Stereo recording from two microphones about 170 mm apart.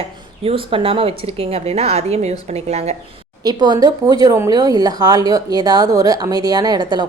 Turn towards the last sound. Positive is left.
turn(degrees=-25)  # may be behind; listen again after turning